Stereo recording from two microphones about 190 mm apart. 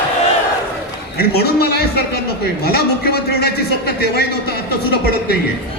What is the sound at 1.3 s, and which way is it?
A man's voice, 55° left (ahead or behind).